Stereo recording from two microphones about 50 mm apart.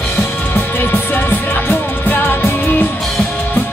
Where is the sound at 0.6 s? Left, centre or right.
Left.